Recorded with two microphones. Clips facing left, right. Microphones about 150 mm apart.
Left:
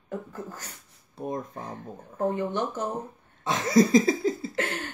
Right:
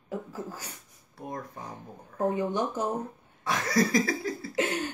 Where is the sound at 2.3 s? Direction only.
10° right (ahead or behind).